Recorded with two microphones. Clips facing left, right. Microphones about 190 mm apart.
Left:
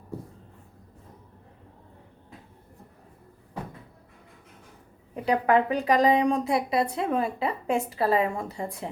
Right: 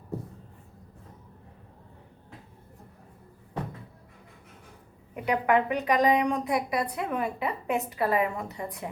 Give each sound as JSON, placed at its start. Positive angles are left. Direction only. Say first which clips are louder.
{"t": 5.1, "sound": "a woman's voice", "louder": "left 2 dB", "side_deg": 30}